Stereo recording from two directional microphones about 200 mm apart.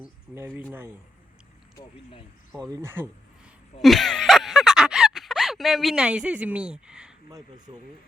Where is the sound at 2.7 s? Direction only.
10° right (ahead or behind).